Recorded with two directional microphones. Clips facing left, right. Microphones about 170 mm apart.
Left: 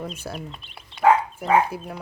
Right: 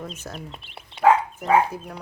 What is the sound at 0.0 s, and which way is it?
Speech, 10° left (ahead or behind).